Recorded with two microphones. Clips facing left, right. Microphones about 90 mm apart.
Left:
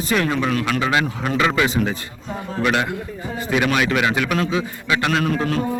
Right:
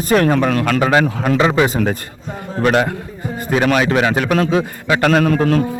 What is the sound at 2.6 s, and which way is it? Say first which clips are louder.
A man's voice: right 5 dB; 40° right (ahead or behind).